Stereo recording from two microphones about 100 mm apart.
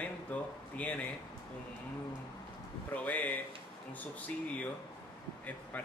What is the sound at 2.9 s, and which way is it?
Speech, 15° left (ahead or behind).